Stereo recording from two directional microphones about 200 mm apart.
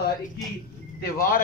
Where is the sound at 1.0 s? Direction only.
50° left (ahead or behind).